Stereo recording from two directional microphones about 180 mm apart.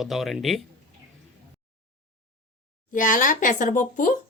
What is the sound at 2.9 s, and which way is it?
Speech, 45° left (ahead or behind).